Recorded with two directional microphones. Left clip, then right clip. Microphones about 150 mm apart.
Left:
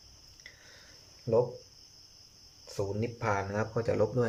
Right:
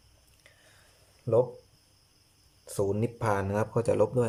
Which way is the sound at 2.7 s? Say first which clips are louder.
Right 5 dB; 30° right (ahead or behind).